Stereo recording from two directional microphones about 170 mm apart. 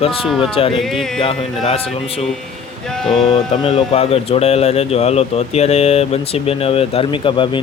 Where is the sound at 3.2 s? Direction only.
30° left (ahead or behind).